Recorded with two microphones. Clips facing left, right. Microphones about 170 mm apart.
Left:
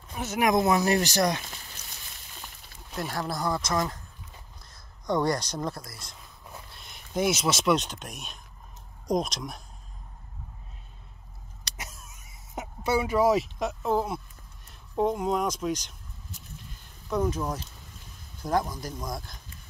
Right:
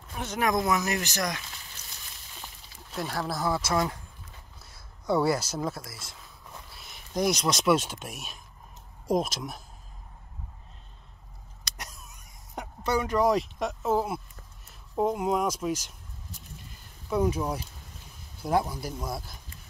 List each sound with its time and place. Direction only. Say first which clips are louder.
0.1 s speech: left 2 dB; 5° left (ahead or behind)
0.5 s speech: left 4 dB; 25° left (ahead or behind)
2.9 s speech: even; centre (ahead or behind)
11.7 s a sound: left 1 dB; 5° left (ahead or behind)
14.7 s speech: left 1 dB; 5° right (ahead or behind)
17.1 s speech: right 1 dB; 10° right (ahead or behind)